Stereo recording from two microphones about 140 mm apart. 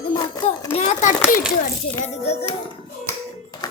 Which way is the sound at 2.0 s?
50° left (ahead or behind).